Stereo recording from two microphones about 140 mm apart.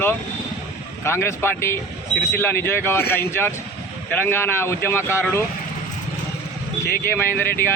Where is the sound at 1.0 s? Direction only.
20° left (ahead or behind).